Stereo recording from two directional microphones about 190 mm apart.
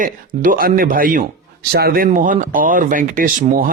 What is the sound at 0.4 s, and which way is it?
Speech, 50° right (ahead or behind).